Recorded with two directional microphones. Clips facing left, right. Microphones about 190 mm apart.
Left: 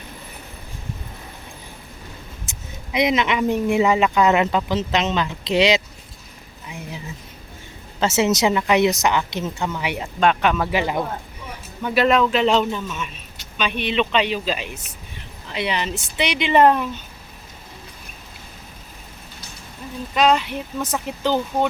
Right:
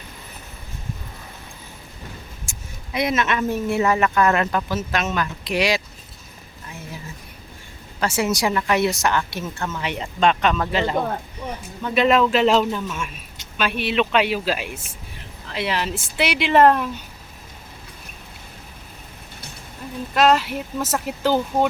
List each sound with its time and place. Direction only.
2.5 s speech: 20° left (ahead or behind)
6.7 s a sound: 15° left (ahead or behind)
7.9 s speech: 25° left (ahead or behind); by 16.9 s centre (ahead or behind)
20.1 s speech: centre (ahead or behind)